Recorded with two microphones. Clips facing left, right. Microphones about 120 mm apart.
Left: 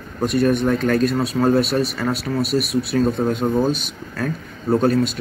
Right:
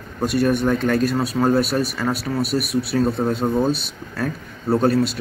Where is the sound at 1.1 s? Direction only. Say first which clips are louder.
Left 1 dB; 5° right (ahead or behind).